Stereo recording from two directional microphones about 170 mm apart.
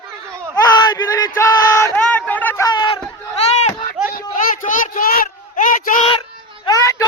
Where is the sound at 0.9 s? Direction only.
25° left (ahead or behind).